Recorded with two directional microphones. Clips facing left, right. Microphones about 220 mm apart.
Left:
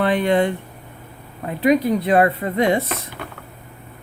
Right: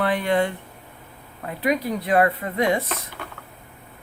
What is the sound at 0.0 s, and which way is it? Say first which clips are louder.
Speech: left 4 dB; 25° left (ahead or behind).